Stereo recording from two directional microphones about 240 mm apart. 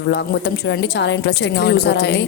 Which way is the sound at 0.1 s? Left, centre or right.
Left.